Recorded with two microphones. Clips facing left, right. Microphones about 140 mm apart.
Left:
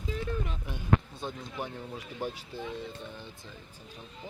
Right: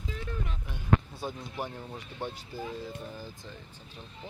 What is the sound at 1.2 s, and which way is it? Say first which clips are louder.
Speech: right 1 dB; 5° right (ahead or behind).